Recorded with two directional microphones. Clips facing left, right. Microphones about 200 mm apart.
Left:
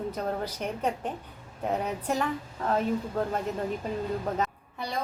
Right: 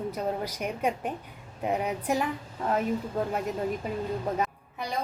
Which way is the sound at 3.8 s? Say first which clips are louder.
Even; 10° right (ahead or behind).